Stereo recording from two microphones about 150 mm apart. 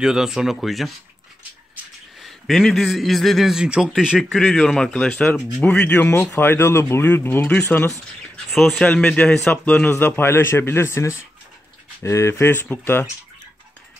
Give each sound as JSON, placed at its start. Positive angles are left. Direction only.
{"t": 0.0, "sound": "a man's voice", "side_deg": -5}
{"t": 2.1, "sound": "a man's voice", "side_deg": 0}